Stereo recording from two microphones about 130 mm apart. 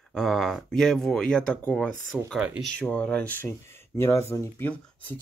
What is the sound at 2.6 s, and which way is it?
Speech, 10° left (ahead or behind).